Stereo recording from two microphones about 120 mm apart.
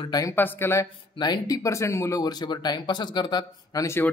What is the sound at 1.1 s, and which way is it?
Speech, 35° left (ahead or behind).